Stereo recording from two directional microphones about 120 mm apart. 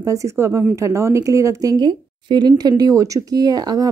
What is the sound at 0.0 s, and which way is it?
Speech, 25° right (ahead or behind).